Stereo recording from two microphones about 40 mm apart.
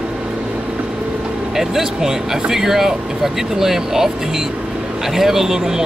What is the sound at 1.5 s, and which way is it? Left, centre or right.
Speech, centre.